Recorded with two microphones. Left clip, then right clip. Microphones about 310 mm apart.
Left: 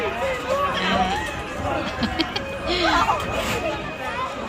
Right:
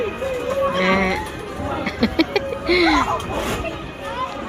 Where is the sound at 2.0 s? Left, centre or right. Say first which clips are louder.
Right 5 dB; centre.